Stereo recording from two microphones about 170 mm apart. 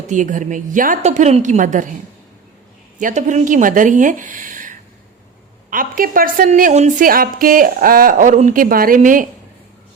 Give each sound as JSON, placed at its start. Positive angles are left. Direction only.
{"t": 0.1, "sound": "a woman's voice", "side_deg": -50}
{"t": 3.0, "sound": "a woman's voice", "side_deg": -45}